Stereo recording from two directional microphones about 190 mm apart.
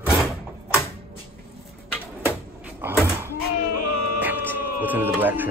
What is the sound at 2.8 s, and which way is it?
Door, 10° right (ahead or behind).